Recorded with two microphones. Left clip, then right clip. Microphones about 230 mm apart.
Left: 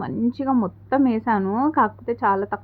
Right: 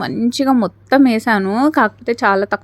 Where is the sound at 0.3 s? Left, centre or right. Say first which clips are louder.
Right 9 dB; right.